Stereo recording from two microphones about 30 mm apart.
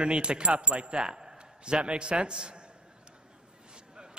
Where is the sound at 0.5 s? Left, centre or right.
Right.